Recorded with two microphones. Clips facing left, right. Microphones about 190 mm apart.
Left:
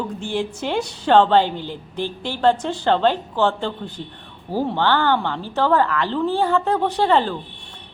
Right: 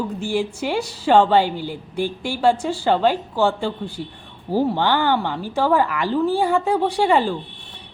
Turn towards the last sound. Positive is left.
turn(degrees=-10)  # may be behind; listen again after turning